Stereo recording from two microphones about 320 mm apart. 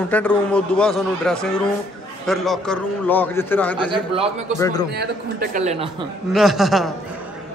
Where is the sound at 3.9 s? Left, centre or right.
Centre.